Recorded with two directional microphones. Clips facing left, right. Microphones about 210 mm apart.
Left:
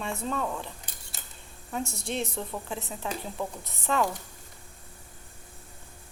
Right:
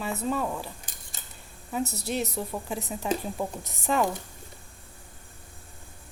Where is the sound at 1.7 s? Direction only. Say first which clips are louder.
Right 3 dB; 5° right (ahead or behind).